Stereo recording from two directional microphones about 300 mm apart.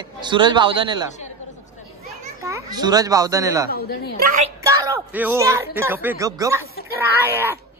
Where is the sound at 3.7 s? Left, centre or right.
Left.